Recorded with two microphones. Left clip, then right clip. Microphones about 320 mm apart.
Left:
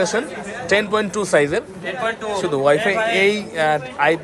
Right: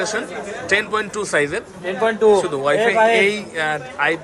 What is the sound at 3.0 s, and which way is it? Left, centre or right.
Speech, right.